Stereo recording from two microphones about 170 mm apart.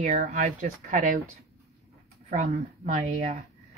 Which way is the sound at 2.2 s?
45° right (ahead or behind).